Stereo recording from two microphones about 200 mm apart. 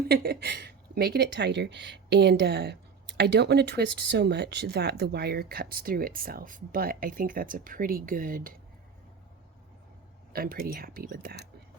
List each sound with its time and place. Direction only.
0.1 s a woman's voice: 55° right (ahead or behind)
10.3 s a woman's voice: 45° right (ahead or behind)